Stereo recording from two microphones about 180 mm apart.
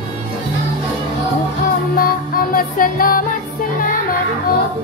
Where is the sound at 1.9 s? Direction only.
55° left (ahead or behind).